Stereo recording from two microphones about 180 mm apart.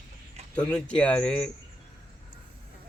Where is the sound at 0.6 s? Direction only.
5° left (ahead or behind).